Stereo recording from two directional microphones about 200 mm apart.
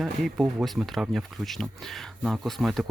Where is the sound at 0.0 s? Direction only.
Centre (ahead or behind).